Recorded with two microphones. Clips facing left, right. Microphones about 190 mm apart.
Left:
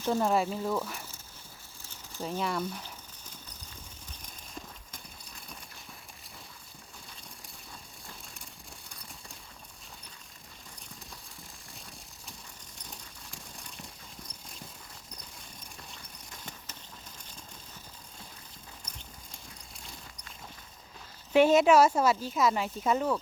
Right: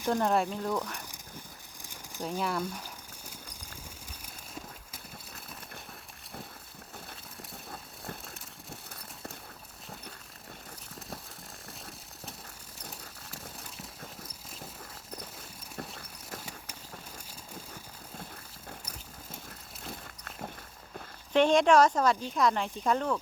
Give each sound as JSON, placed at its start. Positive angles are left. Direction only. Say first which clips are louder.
{"t": 0.1, "sound": "speech", "louder": "even", "side_deg": 0}
{"t": 1.8, "sound": "a sound", "louder": "even", "side_deg": -15}
{"t": 7.7, "sound": "engine", "louder": "right 6 dB", "side_deg": -60}
{"t": 12.9, "sound": "horse", "louder": "even", "side_deg": -5}
{"t": 16.4, "sound": "a sound", "louder": "right 2 dB", "side_deg": -10}
{"t": 19.8, "sound": "walk", "louder": "right 8 dB", "side_deg": -60}
{"t": 21.3, "sound": "speech", "louder": "left 1 dB", "side_deg": 5}